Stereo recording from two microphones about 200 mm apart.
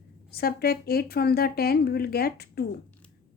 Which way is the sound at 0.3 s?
50° left (ahead or behind).